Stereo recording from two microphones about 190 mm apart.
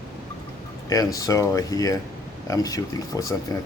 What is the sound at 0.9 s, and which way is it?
Speech, 20° left (ahead or behind).